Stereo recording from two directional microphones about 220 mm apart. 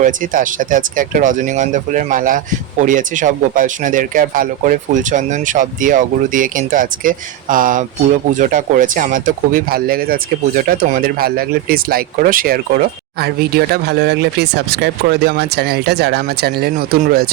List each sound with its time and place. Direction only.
0.0 s speech: 35° right (ahead or behind)